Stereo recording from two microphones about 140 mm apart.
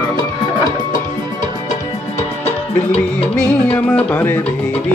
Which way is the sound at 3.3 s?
15° left (ahead or behind).